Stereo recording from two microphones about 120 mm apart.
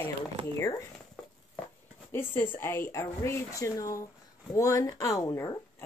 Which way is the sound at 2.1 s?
15° left (ahead or behind).